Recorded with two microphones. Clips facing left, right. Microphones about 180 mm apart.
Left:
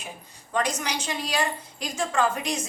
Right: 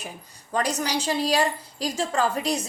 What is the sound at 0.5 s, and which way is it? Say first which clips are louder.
A woman's voice: right 2 dB; 35° right (ahead or behind).